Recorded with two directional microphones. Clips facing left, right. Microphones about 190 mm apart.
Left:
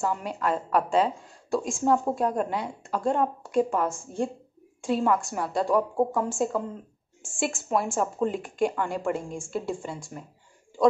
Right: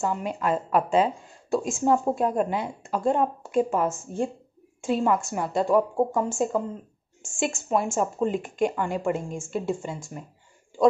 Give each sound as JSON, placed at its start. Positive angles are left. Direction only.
{"t": 0.0, "sound": "speech", "side_deg": 0}